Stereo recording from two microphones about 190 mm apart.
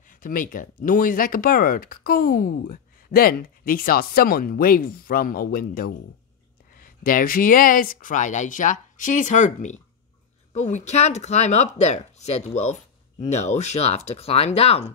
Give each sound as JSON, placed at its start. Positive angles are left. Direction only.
{"t": 0.2, "sound": "speech", "side_deg": 45}